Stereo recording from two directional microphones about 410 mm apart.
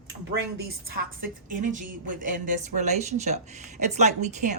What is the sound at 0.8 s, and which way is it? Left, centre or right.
A woman's voice, right.